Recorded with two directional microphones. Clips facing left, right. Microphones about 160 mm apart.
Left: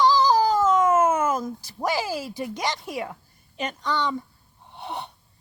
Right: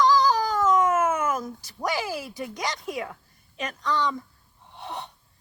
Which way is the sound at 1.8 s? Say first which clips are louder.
Left 2 dB; 30° left (ahead or behind).